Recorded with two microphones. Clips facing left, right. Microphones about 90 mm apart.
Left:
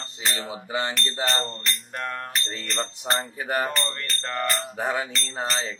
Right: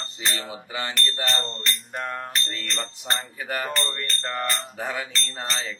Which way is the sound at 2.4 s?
25° left (ahead or behind).